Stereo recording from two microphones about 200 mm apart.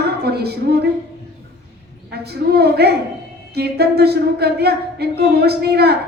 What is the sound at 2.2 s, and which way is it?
Speech, 55° right (ahead or behind).